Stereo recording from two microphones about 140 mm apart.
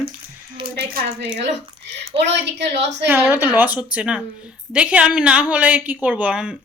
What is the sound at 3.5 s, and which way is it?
A woman's voice, 15° right (ahead or behind).